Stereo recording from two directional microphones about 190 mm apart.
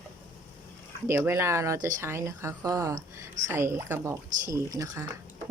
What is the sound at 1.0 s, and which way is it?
Speech, 10° right (ahead or behind).